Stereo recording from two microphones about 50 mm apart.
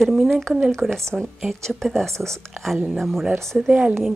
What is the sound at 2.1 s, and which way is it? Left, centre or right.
Speech, right.